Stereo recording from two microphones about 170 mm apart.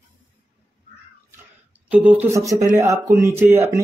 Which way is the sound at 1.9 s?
10° right (ahead or behind).